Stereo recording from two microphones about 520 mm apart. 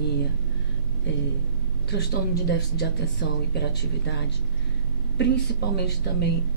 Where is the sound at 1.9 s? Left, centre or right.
Centre.